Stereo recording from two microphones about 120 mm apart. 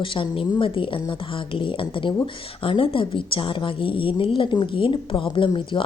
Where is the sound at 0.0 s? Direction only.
45° left (ahead or behind).